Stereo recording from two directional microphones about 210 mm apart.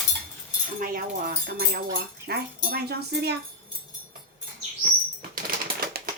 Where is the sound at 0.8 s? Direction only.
45° right (ahead or behind).